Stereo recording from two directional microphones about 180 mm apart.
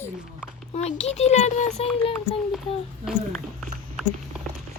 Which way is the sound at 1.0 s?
35° left (ahead or behind).